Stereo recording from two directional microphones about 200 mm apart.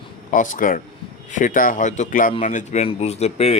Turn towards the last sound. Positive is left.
turn(degrees=30)  # may be behind; listen again after turning